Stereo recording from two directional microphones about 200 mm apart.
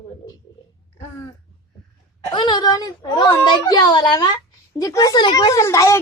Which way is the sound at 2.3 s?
20° left (ahead or behind).